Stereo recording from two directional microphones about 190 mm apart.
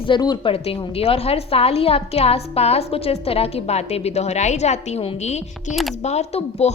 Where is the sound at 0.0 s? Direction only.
25° left (ahead or behind).